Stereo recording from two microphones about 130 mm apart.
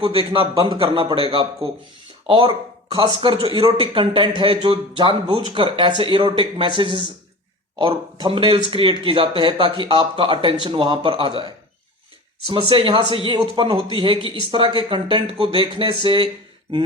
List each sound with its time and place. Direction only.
0.0 s a man's voice: 45° right (ahead or behind)